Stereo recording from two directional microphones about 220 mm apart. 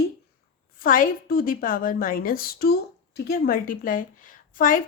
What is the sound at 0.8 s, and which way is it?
A woman's voice, 40° left (ahead or behind).